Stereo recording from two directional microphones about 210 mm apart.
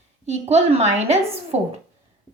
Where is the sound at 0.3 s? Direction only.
30° right (ahead or behind).